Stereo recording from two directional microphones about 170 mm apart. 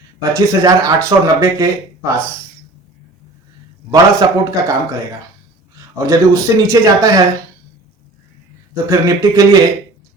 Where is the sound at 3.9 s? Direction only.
20° right (ahead or behind).